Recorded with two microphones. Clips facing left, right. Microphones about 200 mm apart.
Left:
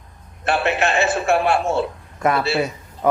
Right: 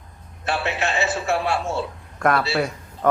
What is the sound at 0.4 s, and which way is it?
Speech, 55° left (ahead or behind).